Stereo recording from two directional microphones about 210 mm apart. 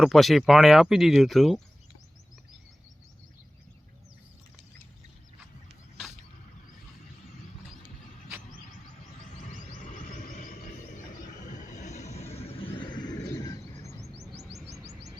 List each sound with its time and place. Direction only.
0.0 s speech: centre (ahead or behind)
9.6 s music: 35° left (ahead or behind); by 13.6 s 20° left (ahead or behind)